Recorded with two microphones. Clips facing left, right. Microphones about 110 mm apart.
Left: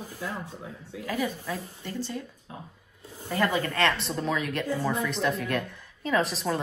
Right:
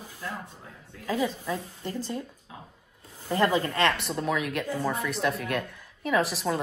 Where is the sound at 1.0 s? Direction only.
20° right (ahead or behind).